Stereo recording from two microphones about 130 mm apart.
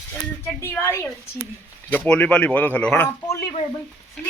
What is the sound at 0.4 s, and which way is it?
Speech, 20° left (ahead or behind).